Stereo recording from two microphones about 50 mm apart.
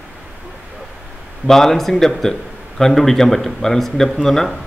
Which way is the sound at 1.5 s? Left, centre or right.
Centre.